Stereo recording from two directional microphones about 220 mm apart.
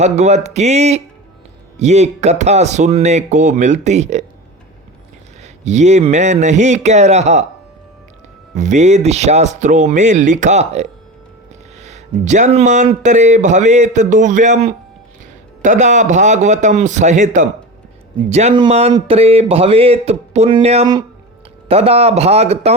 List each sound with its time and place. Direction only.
0.0 s speech: 30° right (ahead or behind)
5.4 s speech: 30° right (ahead or behind)
8.5 s speech: 35° right (ahead or behind)
15.6 s speech: 35° right (ahead or behind)